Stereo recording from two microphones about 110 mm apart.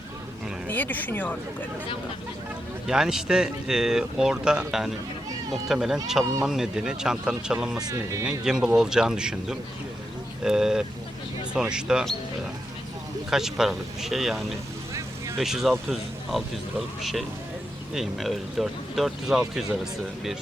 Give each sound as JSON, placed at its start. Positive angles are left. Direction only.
{"t": 0.7, "sound": "speech", "side_deg": 15}
{"t": 2.8, "sound": "speech", "side_deg": -5}
{"t": 7.8, "sound": "speech", "side_deg": -35}
{"t": 8.2, "sound": "speech", "side_deg": -10}
{"t": 13.3, "sound": "speech", "side_deg": -5}